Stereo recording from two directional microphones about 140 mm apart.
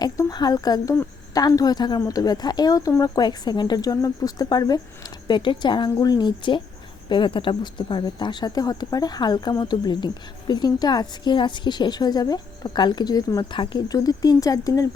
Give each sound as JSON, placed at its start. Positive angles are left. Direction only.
{"t": 0.0, "sound": "a woman's voice", "side_deg": 30}